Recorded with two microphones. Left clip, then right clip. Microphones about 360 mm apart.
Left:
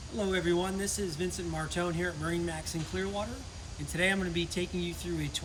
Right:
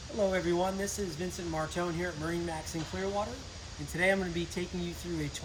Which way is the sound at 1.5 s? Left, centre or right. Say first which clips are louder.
Right 2 dB; centre.